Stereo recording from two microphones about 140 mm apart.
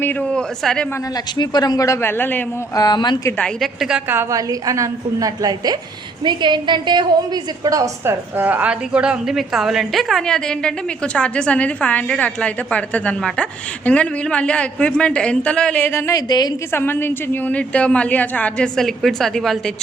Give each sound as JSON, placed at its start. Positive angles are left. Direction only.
{"t": 0.0, "sound": "a woman's voice", "side_deg": 10}
{"t": 1.1, "sound": "speech", "side_deg": 30}
{"t": 2.7, "sound": "speech", "side_deg": 30}
{"t": 3.2, "sound": "a woman's voice", "side_deg": 10}
{"t": 3.6, "sound": "a woman's voice", "side_deg": -5}
{"t": 4.1, "sound": "a woman's voice", "side_deg": -20}
{"t": 8.4, "sound": "a woman's voice", "side_deg": -10}
{"t": 16.7, "sound": "a woman's voice", "side_deg": 15}